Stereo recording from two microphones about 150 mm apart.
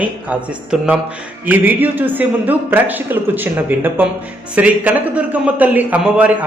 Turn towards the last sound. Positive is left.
turn(degrees=-10)  # may be behind; listen again after turning